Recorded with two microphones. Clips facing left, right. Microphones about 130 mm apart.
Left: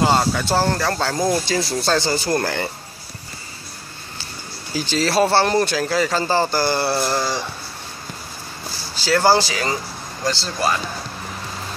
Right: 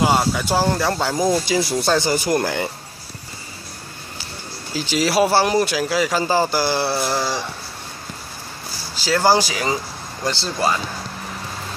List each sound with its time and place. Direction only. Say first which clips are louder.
0.0 s speech: even; 10° right (ahead or behind)
4.7 s speech: even; 10° right (ahead or behind)
9.0 s speech: left 1 dB; 10° right (ahead or behind)